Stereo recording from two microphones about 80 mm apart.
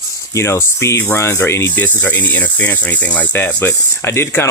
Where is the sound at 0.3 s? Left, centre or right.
Left.